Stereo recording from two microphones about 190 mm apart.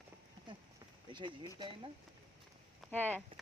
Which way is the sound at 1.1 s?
25° right (ahead or behind).